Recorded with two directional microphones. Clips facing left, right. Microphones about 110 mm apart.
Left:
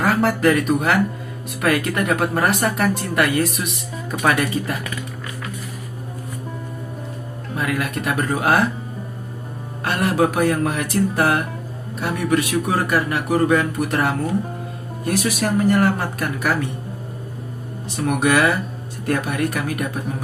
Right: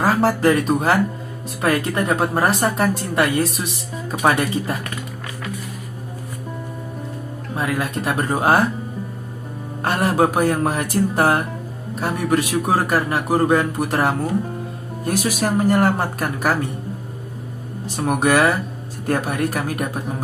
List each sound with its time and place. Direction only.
0.0 s speech: 30° right (ahead or behind)
7.5 s speech: 30° right (ahead or behind)
9.8 s speech: 35° right (ahead or behind)
17.8 s speech: 35° right (ahead or behind)